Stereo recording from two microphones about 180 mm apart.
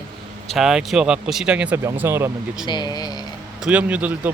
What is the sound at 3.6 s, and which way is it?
Speech, 5° right (ahead or behind).